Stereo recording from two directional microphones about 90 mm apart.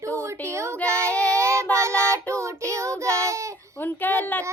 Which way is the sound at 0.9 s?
30° right (ahead or behind).